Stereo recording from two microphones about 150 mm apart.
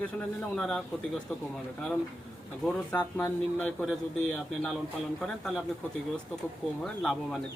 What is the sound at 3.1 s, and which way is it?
Speech, 15° left (ahead or behind).